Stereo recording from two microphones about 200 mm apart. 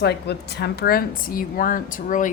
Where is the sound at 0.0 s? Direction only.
55° left (ahead or behind).